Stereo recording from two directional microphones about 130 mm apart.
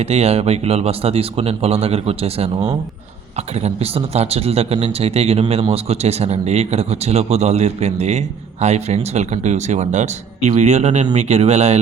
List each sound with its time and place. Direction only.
0.0 s speech: 55° right (ahead or behind)